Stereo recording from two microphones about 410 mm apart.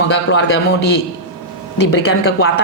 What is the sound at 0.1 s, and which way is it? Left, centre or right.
Speech, left.